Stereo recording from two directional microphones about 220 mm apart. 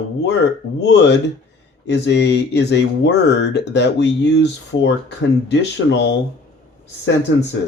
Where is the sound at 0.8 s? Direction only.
55° left (ahead or behind).